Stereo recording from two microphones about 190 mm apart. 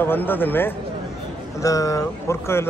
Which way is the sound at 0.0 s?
10° left (ahead or behind).